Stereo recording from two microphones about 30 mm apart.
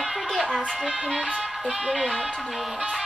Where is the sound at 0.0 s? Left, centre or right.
Centre.